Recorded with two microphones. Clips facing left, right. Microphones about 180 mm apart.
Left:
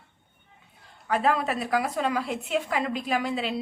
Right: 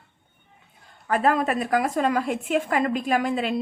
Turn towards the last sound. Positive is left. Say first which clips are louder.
# right 4 dB
turn(degrees=-50)  # may be behind; listen again after turning